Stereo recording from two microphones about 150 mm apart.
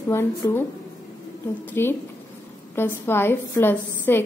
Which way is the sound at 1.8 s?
15° left (ahead or behind).